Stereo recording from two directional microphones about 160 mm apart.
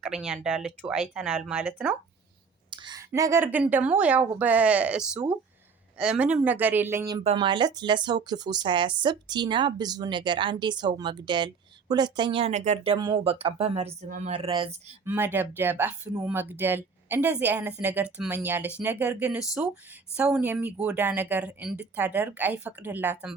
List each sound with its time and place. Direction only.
0.0 s speech: 5° right (ahead or behind)
2.6 s clicking: 30° right (ahead or behind)
3.1 s a woman's voice: 15° right (ahead or behind)
7.3 s speech: 30° right (ahead or behind)
15.0 s a woman's voice: 15° right (ahead or behind)